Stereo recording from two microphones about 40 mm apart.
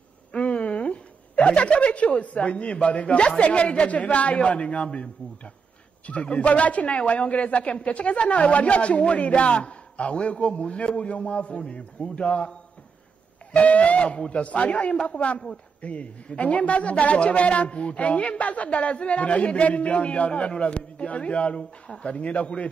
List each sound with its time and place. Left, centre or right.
0.3 s a sound: left
2.0 s a man's voice: left
14.1 s a man's voice: centre
14.4 s a man's voice: left
15.1 s a man's voice: left